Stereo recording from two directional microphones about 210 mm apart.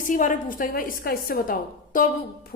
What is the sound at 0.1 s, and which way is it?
A woman's voice, 40° left (ahead or behind).